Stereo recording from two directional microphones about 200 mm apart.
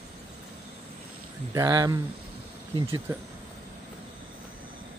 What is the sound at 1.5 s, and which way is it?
Speech, 15° right (ahead or behind).